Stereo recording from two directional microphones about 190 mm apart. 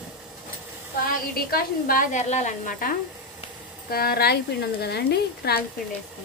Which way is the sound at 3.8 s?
55° left (ahead or behind).